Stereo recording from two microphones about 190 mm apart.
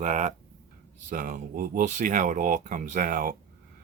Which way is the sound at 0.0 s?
40° right (ahead or behind).